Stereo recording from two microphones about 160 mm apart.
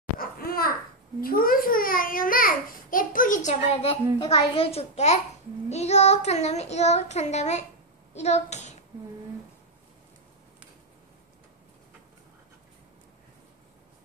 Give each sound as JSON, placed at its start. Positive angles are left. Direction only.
{"t": 0.2, "sound": "babbling", "side_deg": 70}
{"t": 1.2, "sound": "a child's voice", "side_deg": 65}